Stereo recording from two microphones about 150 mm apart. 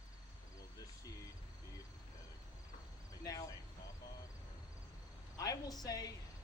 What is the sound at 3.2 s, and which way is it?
Speech, 25° left (ahead or behind).